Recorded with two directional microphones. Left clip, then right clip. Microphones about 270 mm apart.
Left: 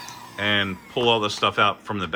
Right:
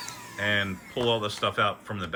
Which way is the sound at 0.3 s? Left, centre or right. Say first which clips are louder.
Left 4 dB; centre.